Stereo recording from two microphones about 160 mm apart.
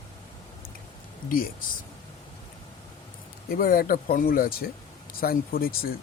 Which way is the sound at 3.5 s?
65° left (ahead or behind).